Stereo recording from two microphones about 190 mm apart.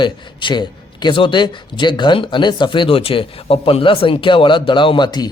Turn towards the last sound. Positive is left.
turn(degrees=25)  # may be behind; listen again after turning